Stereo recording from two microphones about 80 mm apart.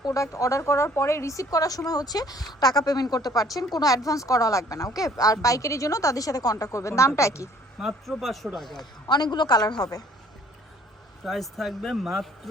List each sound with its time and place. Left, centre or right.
0.0 s a woman's voice: left
7.8 s speech: centre
9.0 s a woman's voice: left
11.2 s speech: centre